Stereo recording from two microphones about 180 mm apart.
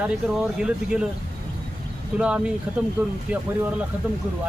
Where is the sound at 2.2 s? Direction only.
5° right (ahead or behind).